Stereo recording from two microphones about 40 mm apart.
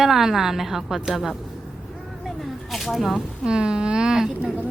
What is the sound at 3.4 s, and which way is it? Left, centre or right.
Speech, right.